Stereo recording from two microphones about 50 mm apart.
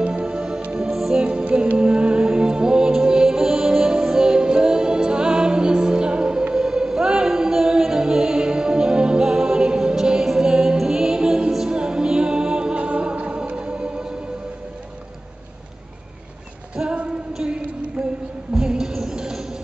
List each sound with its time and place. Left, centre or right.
0.0 s music: centre
0.8 s music: centre
1.1 s music: right
16.7 s female singing: right
17.4 s a sound: centre
18.7 s music: centre